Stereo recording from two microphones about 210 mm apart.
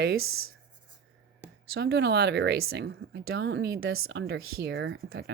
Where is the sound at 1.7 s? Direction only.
50° right (ahead or behind).